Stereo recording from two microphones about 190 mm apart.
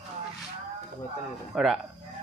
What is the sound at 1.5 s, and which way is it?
Speech, centre (ahead or behind).